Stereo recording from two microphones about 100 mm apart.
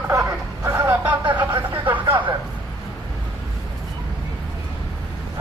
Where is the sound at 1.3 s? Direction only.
55° right (ahead or behind).